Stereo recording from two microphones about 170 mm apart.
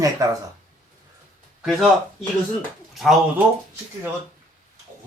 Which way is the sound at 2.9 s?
Centre (ahead or behind).